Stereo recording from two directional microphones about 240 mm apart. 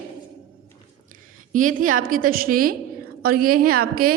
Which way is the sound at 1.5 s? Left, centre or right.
Right.